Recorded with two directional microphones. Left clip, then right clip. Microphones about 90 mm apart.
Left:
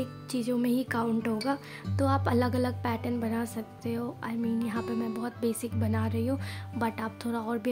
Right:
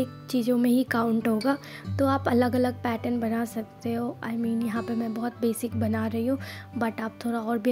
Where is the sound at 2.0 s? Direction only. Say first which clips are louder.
Right 4 dB; 35° right (ahead or behind).